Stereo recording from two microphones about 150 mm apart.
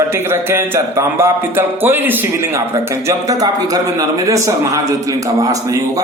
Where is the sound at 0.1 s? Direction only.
15° right (ahead or behind).